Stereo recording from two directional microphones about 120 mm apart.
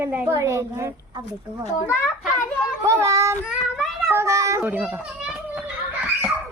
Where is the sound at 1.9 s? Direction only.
15° left (ahead or behind).